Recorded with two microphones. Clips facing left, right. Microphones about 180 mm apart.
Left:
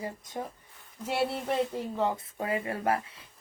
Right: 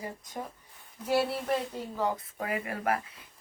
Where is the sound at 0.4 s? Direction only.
25° left (ahead or behind).